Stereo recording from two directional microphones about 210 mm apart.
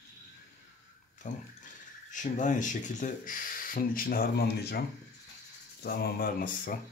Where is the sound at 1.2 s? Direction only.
35° left (ahead or behind).